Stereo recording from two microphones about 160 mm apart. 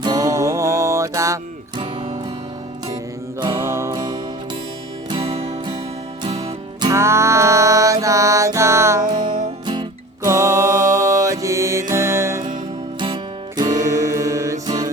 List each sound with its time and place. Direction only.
0.0 s music: 20° right (ahead or behind)
3.4 s music: 15° right (ahead or behind)
5.0 s music: 35° right (ahead or behind)
6.8 s music: 15° right (ahead or behind)
9.1 s music: 55° right (ahead or behind)
10.2 s music: 20° right (ahead or behind)
10.5 s music: 60° right (ahead or behind)
11.2 s music: 20° right (ahead or behind)
13.7 s music: 50° right (ahead or behind)
13.9 s music: 20° right (ahead or behind)